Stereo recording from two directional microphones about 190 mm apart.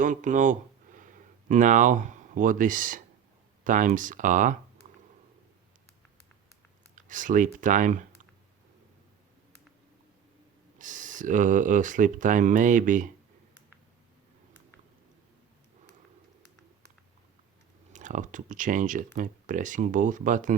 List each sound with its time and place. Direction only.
0.0 s speech: 40° right (ahead or behind)
6.9 s speech: 45° right (ahead or behind)
10.8 s speech: 40° right (ahead or behind)
17.9 s speech: 40° right (ahead or behind)